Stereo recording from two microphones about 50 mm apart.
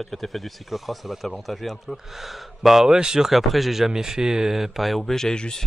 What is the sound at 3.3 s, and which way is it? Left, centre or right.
Speech, centre.